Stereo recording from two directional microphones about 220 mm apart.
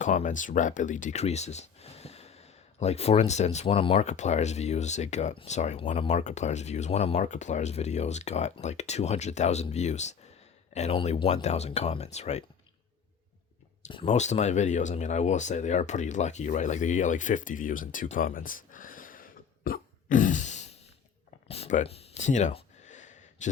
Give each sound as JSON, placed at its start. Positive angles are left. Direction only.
{"t": 0.0, "sound": "speech", "side_deg": 35}
{"t": 13.8, "sound": "speech", "side_deg": 30}
{"t": 21.4, "sound": "a sound", "side_deg": 25}